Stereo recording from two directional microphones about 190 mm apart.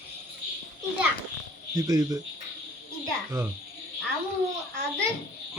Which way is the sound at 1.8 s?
20° right (ahead or behind).